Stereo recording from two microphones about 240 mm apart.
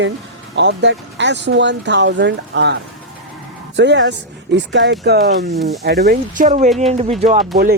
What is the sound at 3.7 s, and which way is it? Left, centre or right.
Speech, right.